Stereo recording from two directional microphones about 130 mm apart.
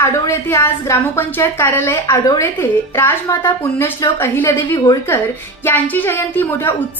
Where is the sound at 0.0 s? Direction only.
20° left (ahead or behind).